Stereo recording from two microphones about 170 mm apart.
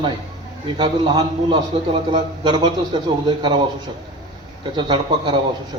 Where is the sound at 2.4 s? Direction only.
25° right (ahead or behind).